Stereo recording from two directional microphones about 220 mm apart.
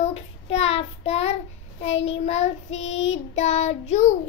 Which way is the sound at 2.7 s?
60° left (ahead or behind).